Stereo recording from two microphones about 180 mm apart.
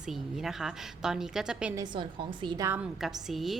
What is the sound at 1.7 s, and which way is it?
Speech, 25° right (ahead or behind).